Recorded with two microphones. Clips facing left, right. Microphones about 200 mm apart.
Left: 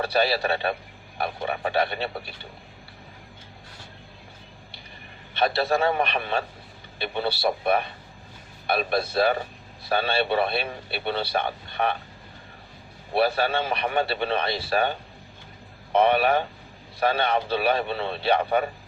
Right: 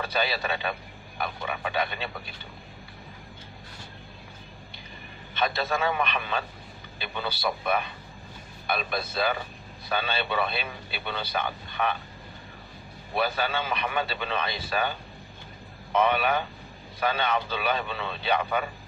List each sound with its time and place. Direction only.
0.0 s a man's voice: 35° left (ahead or behind)
5.4 s a man's voice: 35° left (ahead or behind)
9.1 s a man's voice: 35° left (ahead or behind)
13.1 s a man's voice: 35° left (ahead or behind)
16.0 s a man's voice: 35° left (ahead or behind)